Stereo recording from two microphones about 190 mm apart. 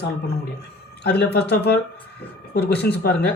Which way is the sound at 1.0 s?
60° left (ahead or behind).